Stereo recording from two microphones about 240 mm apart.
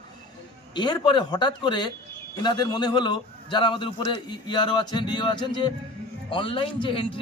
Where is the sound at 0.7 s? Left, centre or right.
Centre.